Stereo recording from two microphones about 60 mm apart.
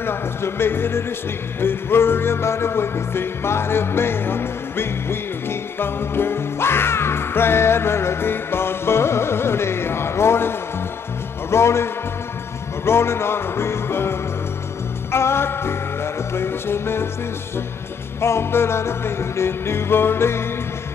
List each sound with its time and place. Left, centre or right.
0.0 s speech: left
1.6 s music: left
11.5 s music: left
18.2 s music: left